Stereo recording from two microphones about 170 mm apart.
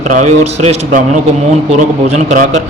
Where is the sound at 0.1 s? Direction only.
45° right (ahead or behind).